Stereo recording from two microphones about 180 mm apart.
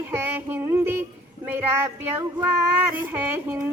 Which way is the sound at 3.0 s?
10° right (ahead or behind).